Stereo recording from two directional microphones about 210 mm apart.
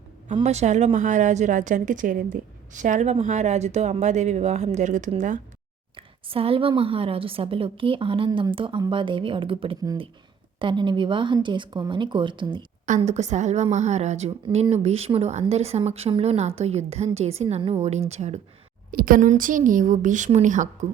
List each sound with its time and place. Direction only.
0.3 s a woman's voice: 30° right (ahead or behind)
12.8 s a woman's voice: 35° right (ahead or behind)
18.9 s a woman's voice: 45° right (ahead or behind)